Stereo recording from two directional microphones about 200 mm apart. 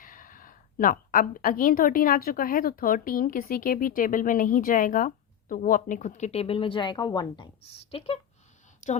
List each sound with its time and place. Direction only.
0.0 s a woman's voice: 45° left (ahead or behind)